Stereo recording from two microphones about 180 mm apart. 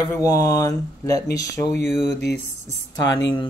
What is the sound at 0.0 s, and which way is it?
Speech, 20° left (ahead or behind).